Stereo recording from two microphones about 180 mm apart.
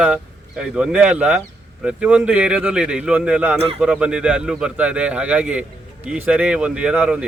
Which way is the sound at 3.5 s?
35° right (ahead or behind).